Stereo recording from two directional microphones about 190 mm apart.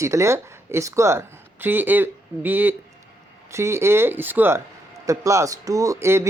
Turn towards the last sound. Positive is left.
turn(degrees=-15)  # may be behind; listen again after turning